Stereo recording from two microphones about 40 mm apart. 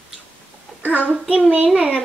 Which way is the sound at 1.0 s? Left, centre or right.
Right.